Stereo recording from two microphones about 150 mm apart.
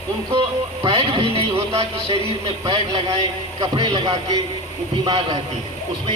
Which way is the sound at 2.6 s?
30° right (ahead or behind).